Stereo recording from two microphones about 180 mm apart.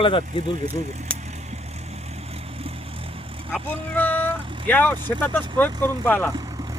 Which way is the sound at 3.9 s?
10° left (ahead or behind).